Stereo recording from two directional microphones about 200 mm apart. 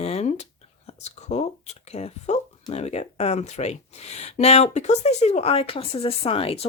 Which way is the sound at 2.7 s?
35° left (ahead or behind).